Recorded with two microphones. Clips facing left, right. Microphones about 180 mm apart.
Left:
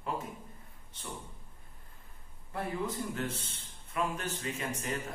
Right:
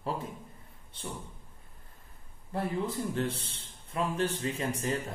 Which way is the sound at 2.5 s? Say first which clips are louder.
Right 3 dB; 30° right (ahead or behind).